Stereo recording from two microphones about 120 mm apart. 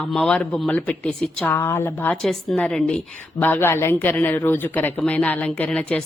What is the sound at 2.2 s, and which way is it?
A woman's voice, 5° left (ahead or behind).